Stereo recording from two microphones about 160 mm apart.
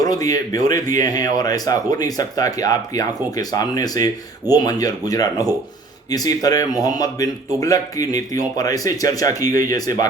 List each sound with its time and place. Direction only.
0.0 s speech: 20° left (ahead or behind)